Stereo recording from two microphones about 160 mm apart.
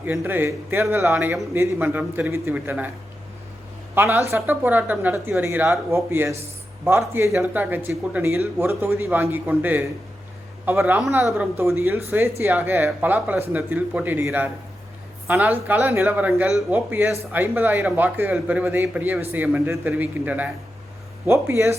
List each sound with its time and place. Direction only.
0.0 s speech: 15° right (ahead or behind)
3.9 s speech: 15° right (ahead or behind)